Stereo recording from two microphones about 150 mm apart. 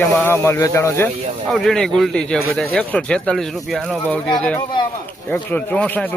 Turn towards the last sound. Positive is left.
turn(degrees=10)  # may be behind; listen again after turning